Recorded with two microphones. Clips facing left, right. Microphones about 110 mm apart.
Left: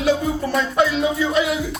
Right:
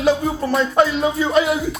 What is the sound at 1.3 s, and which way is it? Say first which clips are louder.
Speech: right 3 dB; 35° right (ahead or behind).